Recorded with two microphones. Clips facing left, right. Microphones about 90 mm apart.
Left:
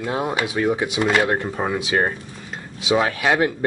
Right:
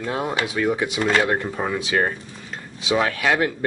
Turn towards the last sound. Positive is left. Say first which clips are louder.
# left 1 dB
turn(degrees=20)  # may be behind; listen again after turning